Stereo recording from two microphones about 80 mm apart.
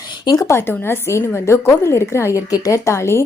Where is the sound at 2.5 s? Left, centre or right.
Left.